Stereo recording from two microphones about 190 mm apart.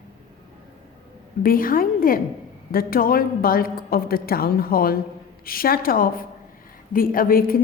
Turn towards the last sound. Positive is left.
turn(degrees=50)  # may be behind; listen again after turning